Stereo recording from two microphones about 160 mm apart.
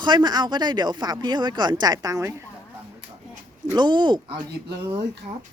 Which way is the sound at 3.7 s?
30° right (ahead or behind).